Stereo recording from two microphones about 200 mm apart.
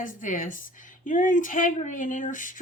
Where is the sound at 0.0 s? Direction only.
40° left (ahead or behind).